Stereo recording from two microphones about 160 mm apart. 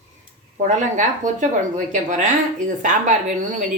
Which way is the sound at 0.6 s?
50° right (ahead or behind).